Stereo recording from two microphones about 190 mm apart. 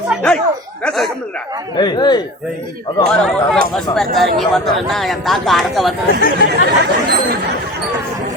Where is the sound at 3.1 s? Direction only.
5° left (ahead or behind).